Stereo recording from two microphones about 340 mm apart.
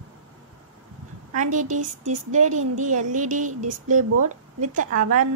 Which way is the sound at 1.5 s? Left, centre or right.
Right.